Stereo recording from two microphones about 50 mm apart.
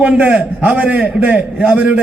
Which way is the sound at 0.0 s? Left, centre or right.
Right.